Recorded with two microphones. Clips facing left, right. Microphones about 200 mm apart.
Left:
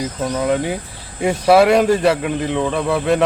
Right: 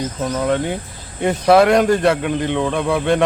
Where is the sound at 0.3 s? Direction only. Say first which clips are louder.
Even; 5° left (ahead or behind).